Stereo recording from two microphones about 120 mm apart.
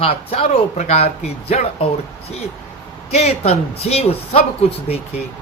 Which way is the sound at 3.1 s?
60° left (ahead or behind).